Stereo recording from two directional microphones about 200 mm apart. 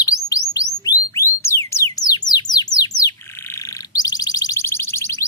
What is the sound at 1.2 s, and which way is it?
Music, 15° left (ahead or behind).